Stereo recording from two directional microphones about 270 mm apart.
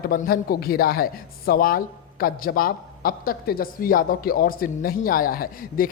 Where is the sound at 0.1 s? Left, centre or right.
Left.